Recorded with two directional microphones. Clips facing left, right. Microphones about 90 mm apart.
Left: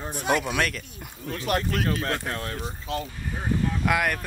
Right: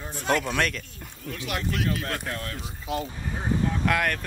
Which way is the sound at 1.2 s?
40° left (ahead or behind).